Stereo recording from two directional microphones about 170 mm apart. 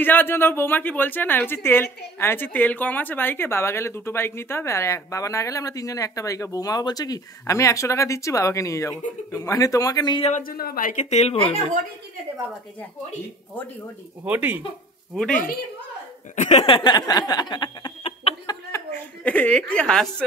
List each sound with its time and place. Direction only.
0.0 s a woman's voice: 10° left (ahead or behind)
10.4 s a woman's voice: 60° left (ahead or behind); by 11.6 s 35° left (ahead or behind)
14.2 s speech: 10° right (ahead or behind)
15.1 s a woman's voice: 5° left (ahead or behind)
16.3 s a sound: 40° left (ahead or behind)
18.5 s a woman's voice: 15° left (ahead or behind)